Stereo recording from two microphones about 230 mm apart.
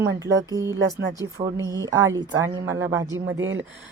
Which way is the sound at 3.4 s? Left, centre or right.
Right.